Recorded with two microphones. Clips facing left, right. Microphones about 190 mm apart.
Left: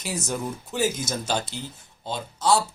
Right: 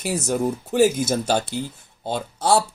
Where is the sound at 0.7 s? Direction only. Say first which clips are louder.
Right 8 dB; 55° right (ahead or behind).